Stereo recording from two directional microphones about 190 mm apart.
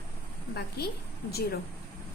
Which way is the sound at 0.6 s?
55° left (ahead or behind).